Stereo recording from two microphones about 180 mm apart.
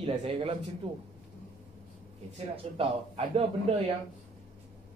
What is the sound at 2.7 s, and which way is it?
Speech, 30° right (ahead or behind).